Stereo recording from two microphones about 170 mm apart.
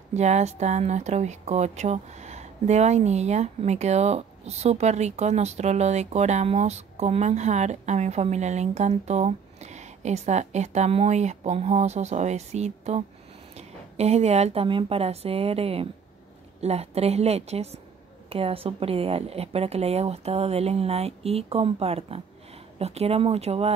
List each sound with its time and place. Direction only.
0.1 s a woman's voice: 40° right (ahead or behind)